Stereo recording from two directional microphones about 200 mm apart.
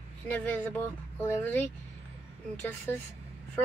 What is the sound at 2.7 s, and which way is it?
Speech, 5° left (ahead or behind).